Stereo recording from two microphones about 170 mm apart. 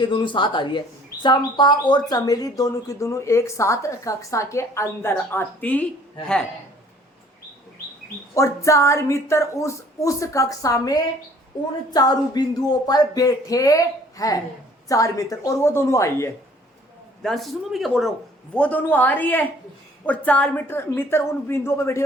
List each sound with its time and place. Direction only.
0.0 s speech: 30° left (ahead or behind); by 5.8 s 10° left (ahead or behind)
8.4 s speech: 15° left (ahead or behind)
17.2 s speech: centre (ahead or behind)